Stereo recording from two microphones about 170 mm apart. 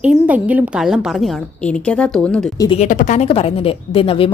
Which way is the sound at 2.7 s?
45° left (ahead or behind).